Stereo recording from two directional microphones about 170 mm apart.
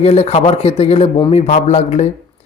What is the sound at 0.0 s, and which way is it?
Speech, 35° left (ahead or behind).